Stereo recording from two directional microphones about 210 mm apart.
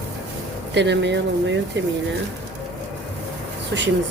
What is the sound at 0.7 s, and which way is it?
Speech, 55° right (ahead or behind).